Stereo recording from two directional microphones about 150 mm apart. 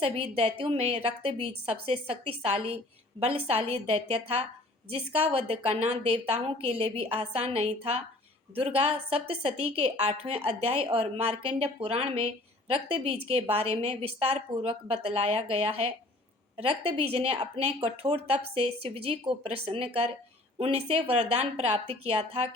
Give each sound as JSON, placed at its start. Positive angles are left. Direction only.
{"t": 0.0, "sound": "a woman's voice", "side_deg": -40}